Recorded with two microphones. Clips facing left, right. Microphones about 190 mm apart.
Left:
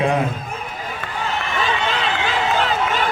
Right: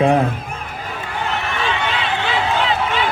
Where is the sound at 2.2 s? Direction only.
45° left (ahead or behind).